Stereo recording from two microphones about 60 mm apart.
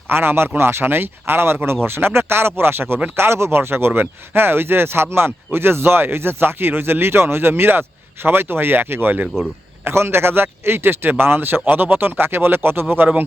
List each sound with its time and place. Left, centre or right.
0.1 s speech: right
9.8 s speech: right